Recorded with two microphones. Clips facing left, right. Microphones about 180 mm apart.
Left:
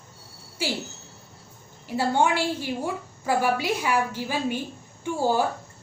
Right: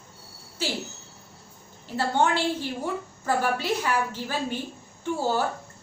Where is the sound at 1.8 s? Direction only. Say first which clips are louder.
Left 1 dB; 10° left (ahead or behind).